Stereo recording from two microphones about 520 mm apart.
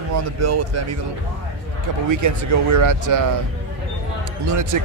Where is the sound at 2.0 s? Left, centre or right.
Right.